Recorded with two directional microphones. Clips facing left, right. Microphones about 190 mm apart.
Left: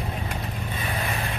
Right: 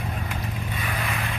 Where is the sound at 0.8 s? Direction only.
30° left (ahead or behind).